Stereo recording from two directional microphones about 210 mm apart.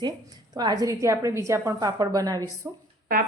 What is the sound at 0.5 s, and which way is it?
A woman's voice, 20° right (ahead or behind).